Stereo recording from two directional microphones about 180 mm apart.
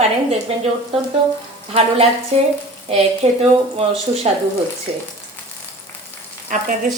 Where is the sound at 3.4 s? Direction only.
35° right (ahead or behind).